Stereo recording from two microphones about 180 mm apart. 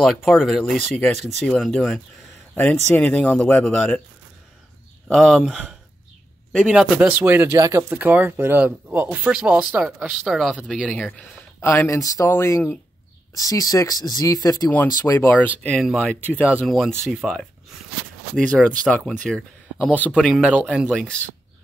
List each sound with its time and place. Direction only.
0.0 s speech: centre (ahead or behind)
5.0 s speech: centre (ahead or behind)
11.6 s speech: 15° left (ahead or behind)
15.8 s speech: centre (ahead or behind)